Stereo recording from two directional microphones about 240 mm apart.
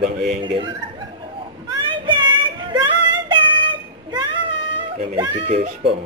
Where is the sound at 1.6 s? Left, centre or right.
Centre.